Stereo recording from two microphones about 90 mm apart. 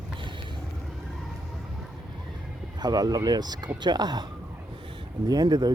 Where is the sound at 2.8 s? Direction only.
45° right (ahead or behind).